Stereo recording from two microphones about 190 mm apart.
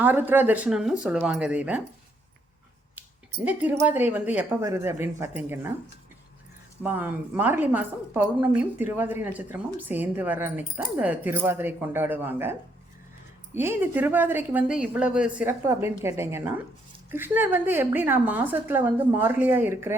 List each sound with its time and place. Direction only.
0.0 s speech: 10° right (ahead or behind)
3.4 s speech: 10° right (ahead or behind)
6.8 s speech: 10° right (ahead or behind)